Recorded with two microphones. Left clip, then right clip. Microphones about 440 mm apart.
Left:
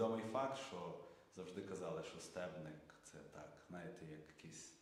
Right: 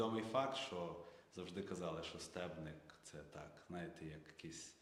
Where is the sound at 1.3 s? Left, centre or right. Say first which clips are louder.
Right 1 dB; right.